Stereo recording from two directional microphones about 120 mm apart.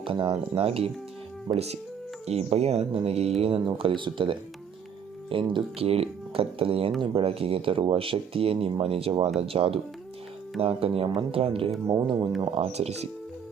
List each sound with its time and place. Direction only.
0.0 s speech: 45° right (ahead or behind)
12.0 s speech: 35° right (ahead or behind)
12.5 s speech: 60° right (ahead or behind)